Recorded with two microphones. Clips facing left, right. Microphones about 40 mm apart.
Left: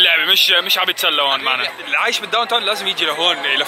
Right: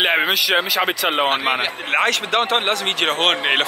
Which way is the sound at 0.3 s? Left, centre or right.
Left.